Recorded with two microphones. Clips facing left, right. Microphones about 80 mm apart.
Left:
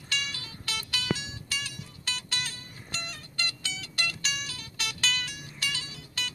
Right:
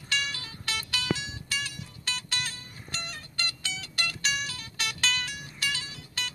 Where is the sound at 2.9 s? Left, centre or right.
Right.